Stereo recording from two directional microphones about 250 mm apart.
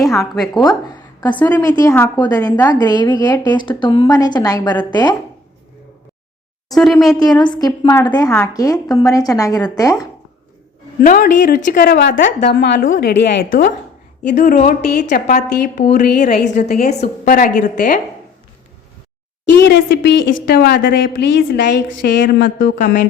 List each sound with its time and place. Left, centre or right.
1.2 s a woman's voice: centre
6.7 s speech: centre
7.2 s a woman's voice: centre
11.0 s a woman's voice: left
19.6 s a woman's voice: left